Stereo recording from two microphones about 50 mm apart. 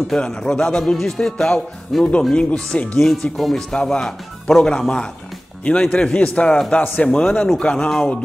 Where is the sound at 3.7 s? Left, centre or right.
Centre.